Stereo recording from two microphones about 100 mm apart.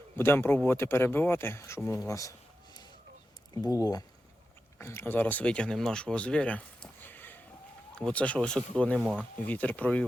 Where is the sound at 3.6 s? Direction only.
35° left (ahead or behind).